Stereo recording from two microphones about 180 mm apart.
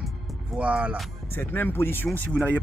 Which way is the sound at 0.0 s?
5° right (ahead or behind).